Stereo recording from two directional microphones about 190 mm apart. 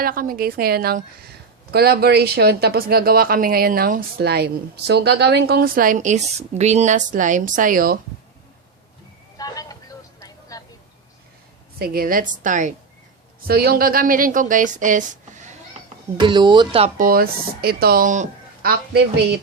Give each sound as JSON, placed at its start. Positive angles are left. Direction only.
{"t": 0.0, "sound": "speech", "side_deg": -50}
{"t": 9.4, "sound": "vehicle", "side_deg": 20}
{"t": 11.8, "sound": "speech", "side_deg": -50}
{"t": 13.5, "sound": "speech", "side_deg": -55}
{"t": 16.2, "sound": "speech", "side_deg": -25}
{"t": 17.0, "sound": "speech", "side_deg": -50}
{"t": 18.9, "sound": "speech", "side_deg": -60}